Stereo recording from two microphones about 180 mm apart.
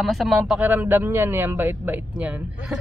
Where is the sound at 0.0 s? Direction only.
Centre (ahead or behind).